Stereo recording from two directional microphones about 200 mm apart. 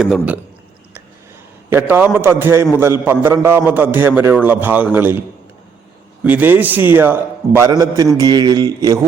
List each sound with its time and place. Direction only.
0.0 s a man's voice: 5° right (ahead or behind)
1.7 s a man's voice: 10° right (ahead or behind)
6.2 s a man's voice: 10° right (ahead or behind)